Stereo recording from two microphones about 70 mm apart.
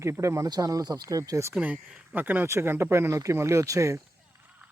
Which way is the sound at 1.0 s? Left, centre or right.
Right.